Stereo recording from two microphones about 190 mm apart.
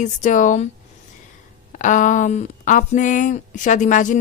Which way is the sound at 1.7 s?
40° left (ahead or behind).